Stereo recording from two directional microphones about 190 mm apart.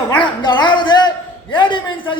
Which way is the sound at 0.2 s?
25° left (ahead or behind).